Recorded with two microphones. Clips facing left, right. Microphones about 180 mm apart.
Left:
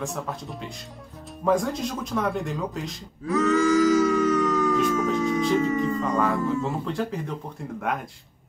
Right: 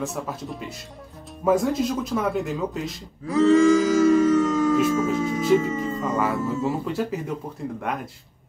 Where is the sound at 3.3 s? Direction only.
30° right (ahead or behind).